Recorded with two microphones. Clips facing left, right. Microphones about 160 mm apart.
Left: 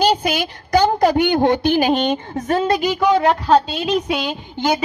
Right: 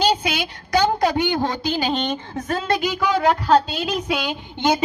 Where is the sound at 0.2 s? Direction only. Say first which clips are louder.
Left 4 dB; 45° left (ahead or behind).